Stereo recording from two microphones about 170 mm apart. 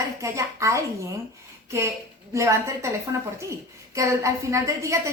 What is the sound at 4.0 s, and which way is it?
A woman's voice, 20° right (ahead or behind).